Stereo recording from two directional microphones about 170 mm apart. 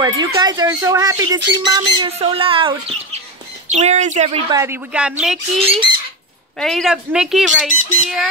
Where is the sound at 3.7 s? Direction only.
45° right (ahead or behind).